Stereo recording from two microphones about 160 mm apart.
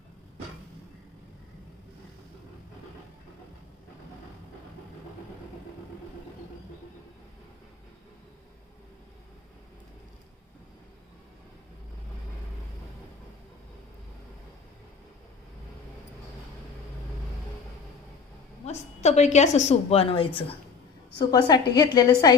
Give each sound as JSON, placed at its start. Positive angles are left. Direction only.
{"t": 18.6, "sound": "a woman's voice", "side_deg": 45}